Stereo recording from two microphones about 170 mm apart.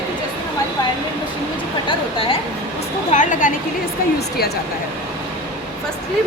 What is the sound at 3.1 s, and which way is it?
Speech, 50° left (ahead or behind).